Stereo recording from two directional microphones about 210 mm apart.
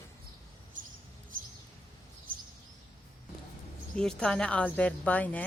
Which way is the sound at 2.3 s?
45° right (ahead or behind).